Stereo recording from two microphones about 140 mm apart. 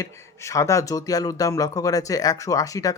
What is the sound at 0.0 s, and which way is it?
Speech, 20° left (ahead or behind).